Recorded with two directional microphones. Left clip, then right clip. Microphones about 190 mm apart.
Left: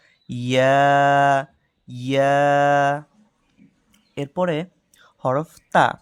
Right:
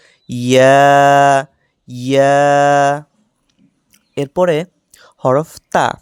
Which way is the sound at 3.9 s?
25° right (ahead or behind).